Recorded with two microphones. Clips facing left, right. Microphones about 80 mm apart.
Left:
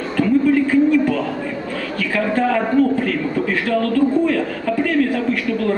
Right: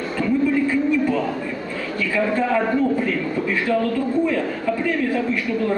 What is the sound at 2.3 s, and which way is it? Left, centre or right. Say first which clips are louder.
A man's voice: left 6 dB; left.